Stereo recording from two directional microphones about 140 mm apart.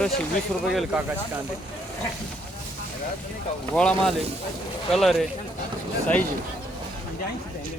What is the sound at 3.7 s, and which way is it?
Speech, 5° left (ahead or behind).